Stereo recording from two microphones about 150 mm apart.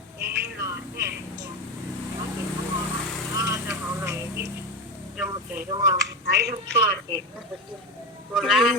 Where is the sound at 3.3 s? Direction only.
20° right (ahead or behind).